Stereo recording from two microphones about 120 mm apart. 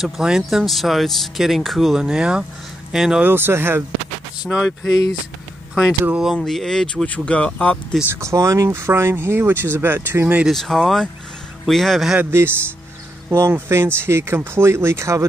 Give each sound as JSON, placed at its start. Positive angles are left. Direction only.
{"t": 0.0, "sound": "speech", "side_deg": -5}
{"t": 3.3, "sound": "speech", "side_deg": -20}
{"t": 4.8, "sound": "speech", "side_deg": 30}
{"t": 5.8, "sound": "speech", "side_deg": -5}
{"t": 8.1, "sound": "speech", "side_deg": -25}
{"t": 10.4, "sound": "speech", "side_deg": 0}
{"t": 12.2, "sound": "speech", "side_deg": -20}